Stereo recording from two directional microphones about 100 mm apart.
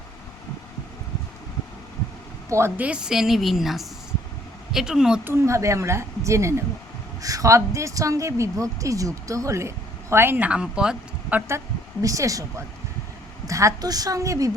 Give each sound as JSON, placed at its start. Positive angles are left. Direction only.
{"t": 2.5, "sound": "speech", "side_deg": -25}
{"t": 2.8, "sound": "a woman's voice", "side_deg": -10}
{"t": 5.2, "sound": "a woman's voice", "side_deg": -25}
{"t": 12.0, "sound": "a woman's voice", "side_deg": -35}